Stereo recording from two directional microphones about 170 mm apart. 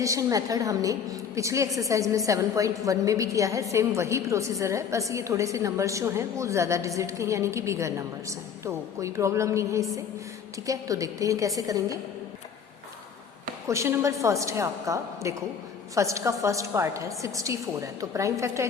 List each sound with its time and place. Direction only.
0.0 s a woman's voice: 20° right (ahead or behind)
13.7 s a woman's voice: 15° right (ahead or behind)